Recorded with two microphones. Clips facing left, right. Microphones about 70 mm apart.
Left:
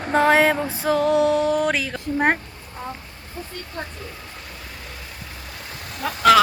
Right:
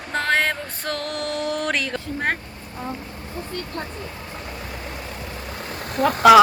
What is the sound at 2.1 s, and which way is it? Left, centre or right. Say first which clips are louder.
Speech: left 6 dB; centre.